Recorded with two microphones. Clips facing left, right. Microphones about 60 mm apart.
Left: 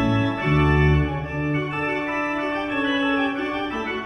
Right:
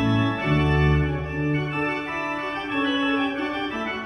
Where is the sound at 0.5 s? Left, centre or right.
Left.